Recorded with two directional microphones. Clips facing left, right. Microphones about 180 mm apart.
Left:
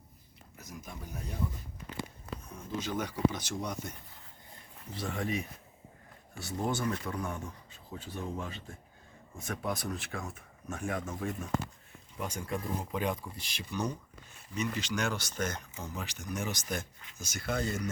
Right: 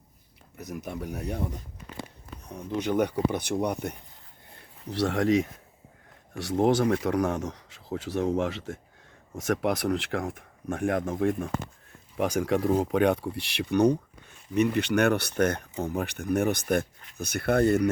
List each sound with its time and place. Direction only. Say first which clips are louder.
0.6 s speech: right 11 dB; 65° right (ahead or behind)
4.9 s speech: right 11 dB; 80° right; by 11.5 s 60° right (ahead or behind)
12.1 s speech: right 11 dB; 90° right; by 17.8 s 60° right (ahead or behind)